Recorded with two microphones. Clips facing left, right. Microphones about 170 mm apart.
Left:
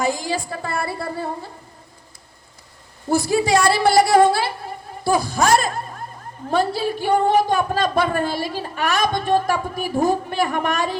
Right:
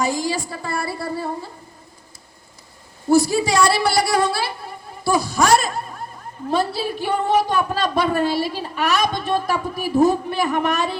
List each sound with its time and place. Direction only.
0.0 s a woman's voice: 55° left (ahead or behind)
3.1 s a woman's voice: 50° left (ahead or behind)